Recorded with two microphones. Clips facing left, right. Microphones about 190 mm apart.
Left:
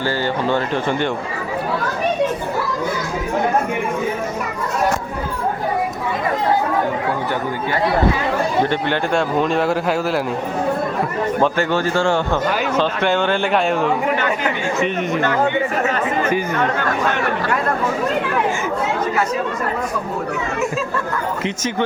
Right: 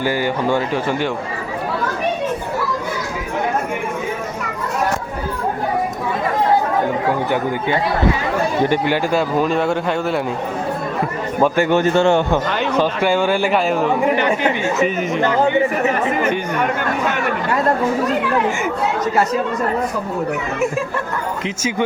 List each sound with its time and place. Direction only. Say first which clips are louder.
0.0 s a man's voice: right 1 dB; 10° right (ahead or behind)
8.7 s a man's voice: right 2 dB; 5° right (ahead or behind)
11.3 s a man's voice: right 4 dB; 10° right (ahead or behind)
12.7 s a man's voice: right 4 dB; 10° right (ahead or behind)
14.2 s speech: right 3 dB; 25° right (ahead or behind)
14.8 s a man's voice: right 1 dB; centre (ahead or behind)
15.8 s a man's voice: right 2 dB; 15° right (ahead or behind)
21.4 s a man's voice: right 2 dB; 10° right (ahead or behind)